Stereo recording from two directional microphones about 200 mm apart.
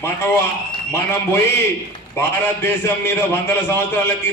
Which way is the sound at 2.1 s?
10° left (ahead or behind).